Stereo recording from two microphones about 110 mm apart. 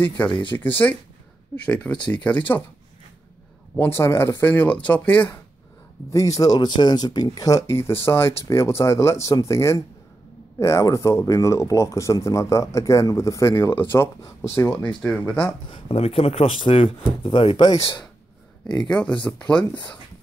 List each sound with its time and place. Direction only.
0.0 s speech: 15° left (ahead or behind)
3.7 s speech: 25° left (ahead or behind)
6.0 s speech: 30° left (ahead or behind); by 15.5 s 10° left (ahead or behind)
15.7 s speech: 60° left (ahead or behind)
18.9 s speech: 10° left (ahead or behind)